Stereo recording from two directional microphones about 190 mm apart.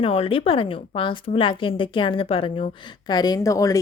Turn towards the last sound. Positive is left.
turn(degrees=15)  # may be behind; listen again after turning